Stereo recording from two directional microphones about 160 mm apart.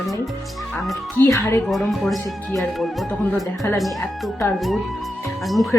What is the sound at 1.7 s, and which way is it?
Speech, centre (ahead or behind).